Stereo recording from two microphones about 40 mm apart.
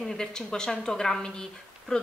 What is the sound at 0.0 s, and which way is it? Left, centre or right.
Speech, centre.